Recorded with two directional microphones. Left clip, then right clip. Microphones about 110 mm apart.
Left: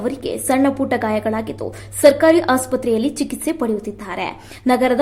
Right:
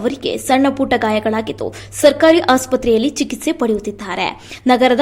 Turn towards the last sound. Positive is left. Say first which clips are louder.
# right 4 dB
turn(degrees=-20)  # may be behind; listen again after turning